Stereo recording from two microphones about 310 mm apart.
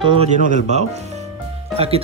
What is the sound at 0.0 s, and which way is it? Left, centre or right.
Speech, centre.